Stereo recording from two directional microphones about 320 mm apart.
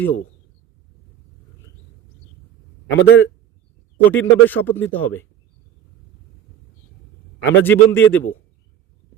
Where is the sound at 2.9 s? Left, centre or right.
Left.